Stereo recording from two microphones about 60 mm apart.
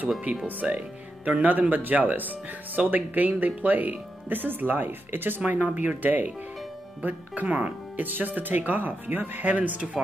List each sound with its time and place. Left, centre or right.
0.5 s speech: right